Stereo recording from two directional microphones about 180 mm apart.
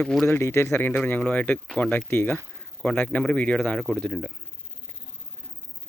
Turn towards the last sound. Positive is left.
turn(degrees=5)  # may be behind; listen again after turning